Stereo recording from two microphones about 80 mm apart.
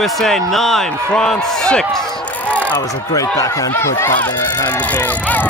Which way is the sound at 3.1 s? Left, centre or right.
Left.